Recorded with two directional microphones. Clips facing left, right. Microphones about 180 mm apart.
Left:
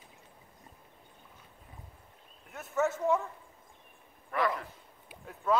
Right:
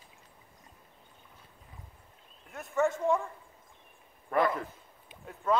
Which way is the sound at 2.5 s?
Centre (ahead or behind).